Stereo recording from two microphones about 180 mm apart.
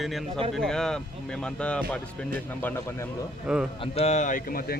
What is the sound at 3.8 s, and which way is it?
Speech, 35° left (ahead or behind).